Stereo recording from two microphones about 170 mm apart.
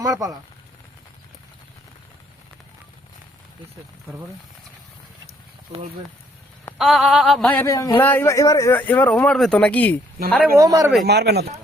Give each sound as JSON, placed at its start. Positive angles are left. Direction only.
{"t": 0.0, "sound": "speech", "side_deg": -20}
{"t": 6.7, "sound": "speech", "side_deg": 0}
{"t": 10.6, "sound": "speech", "side_deg": -20}
{"t": 11.0, "sound": "speech", "side_deg": -75}